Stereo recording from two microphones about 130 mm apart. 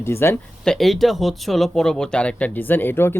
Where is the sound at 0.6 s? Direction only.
5° left (ahead or behind).